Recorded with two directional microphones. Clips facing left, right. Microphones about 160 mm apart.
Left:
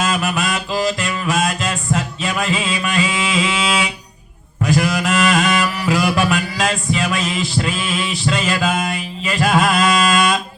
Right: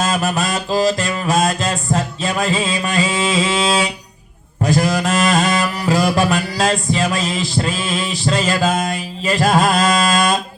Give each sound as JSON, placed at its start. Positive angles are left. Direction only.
{"t": 0.0, "sound": "mantra", "side_deg": -35}